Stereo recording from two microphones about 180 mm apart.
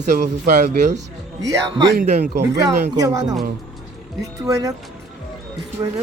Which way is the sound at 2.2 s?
60° right (ahead or behind).